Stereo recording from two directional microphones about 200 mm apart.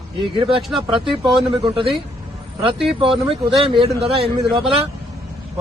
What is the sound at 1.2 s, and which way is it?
Speech, 20° right (ahead or behind).